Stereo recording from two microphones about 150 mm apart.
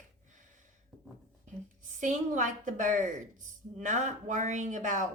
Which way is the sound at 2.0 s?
55° right (ahead or behind).